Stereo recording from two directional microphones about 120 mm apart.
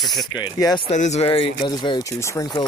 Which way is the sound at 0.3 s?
35° left (ahead or behind).